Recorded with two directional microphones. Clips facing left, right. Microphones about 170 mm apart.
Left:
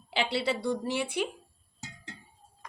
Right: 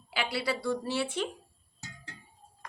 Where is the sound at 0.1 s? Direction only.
25° left (ahead or behind).